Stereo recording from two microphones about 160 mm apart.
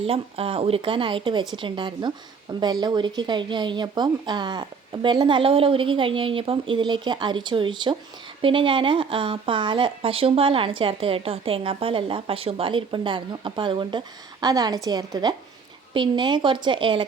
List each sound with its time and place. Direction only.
0.0 s speech: 35° right (ahead or behind)